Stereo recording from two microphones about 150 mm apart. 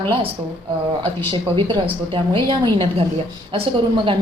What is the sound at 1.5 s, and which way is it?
A woman's voice, 35° right (ahead or behind).